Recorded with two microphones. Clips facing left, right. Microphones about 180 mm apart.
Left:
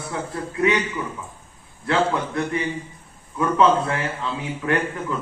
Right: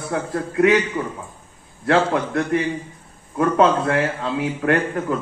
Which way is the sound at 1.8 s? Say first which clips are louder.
Right 3 dB; 55° right (ahead or behind).